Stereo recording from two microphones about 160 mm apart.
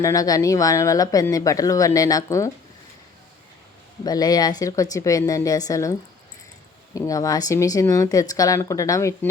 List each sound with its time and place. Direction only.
0.0 s speech: 20° left (ahead or behind)
4.0 s speech: 25° left (ahead or behind)